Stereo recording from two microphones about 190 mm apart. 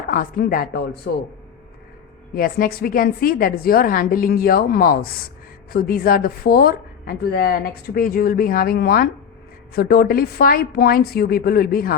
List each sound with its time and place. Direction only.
0.1 s speech: 45° left (ahead or behind)
2.3 s speech: 50° left (ahead or behind)